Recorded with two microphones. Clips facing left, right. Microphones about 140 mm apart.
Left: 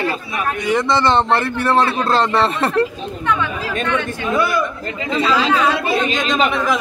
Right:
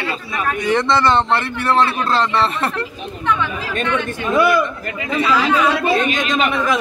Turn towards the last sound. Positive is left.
turn(degrees=25)  # may be behind; listen again after turning